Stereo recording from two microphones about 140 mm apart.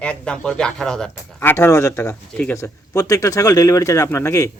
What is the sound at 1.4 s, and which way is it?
Speech, 15° left (ahead or behind).